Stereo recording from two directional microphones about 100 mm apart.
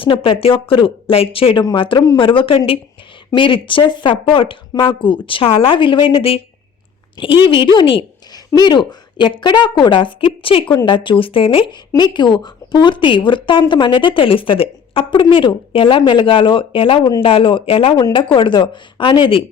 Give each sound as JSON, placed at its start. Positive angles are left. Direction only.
{"t": 0.0, "sound": "a woman's voice", "side_deg": 60}
{"t": 8.5, "sound": "a woman's voice", "side_deg": 45}
{"t": 11.9, "sound": "a woman's voice", "side_deg": 50}